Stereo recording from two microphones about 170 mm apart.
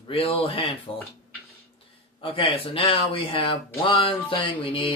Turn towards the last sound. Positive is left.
turn(degrees=30)  # may be behind; listen again after turning